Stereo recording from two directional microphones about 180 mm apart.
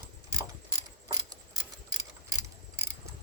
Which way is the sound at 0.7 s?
20° right (ahead or behind).